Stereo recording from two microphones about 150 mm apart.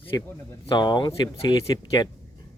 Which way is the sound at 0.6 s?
30° left (ahead or behind).